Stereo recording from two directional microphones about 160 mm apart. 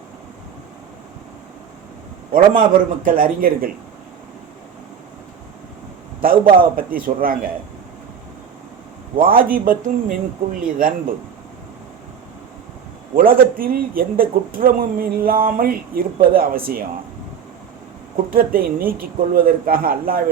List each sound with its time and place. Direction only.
2.3 s speech: 60° right (ahead or behind)
6.2 s speech: 65° right (ahead or behind)
9.1 s speech: 65° right (ahead or behind)
13.1 s speech: 65° right (ahead or behind)
18.3 s speech: 65° right (ahead or behind)